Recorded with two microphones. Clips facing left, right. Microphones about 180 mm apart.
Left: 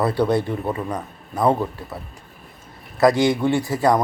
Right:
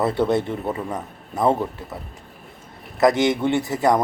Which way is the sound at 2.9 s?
20° right (ahead or behind).